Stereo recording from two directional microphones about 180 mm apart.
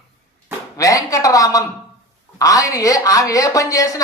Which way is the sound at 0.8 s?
20° left (ahead or behind).